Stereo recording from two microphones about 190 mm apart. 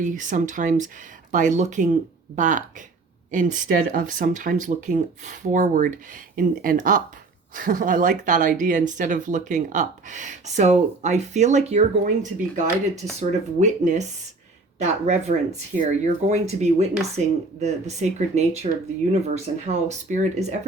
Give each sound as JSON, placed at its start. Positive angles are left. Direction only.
{"t": 0.0, "sound": "speech", "side_deg": -40}